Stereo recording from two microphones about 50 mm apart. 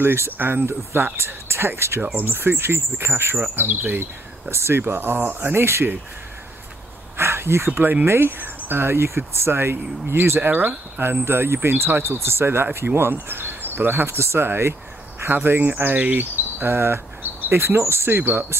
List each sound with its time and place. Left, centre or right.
0.0 s speech: right
3.5 s speech: right
4.5 s speech: right
7.2 s speech: right
14.0 s speech: right
15.3 s speech: right